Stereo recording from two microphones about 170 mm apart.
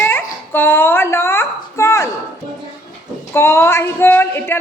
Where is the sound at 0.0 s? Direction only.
10° left (ahead or behind).